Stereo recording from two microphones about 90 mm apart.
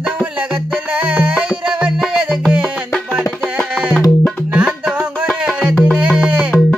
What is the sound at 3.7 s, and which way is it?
Music, 15° right (ahead or behind).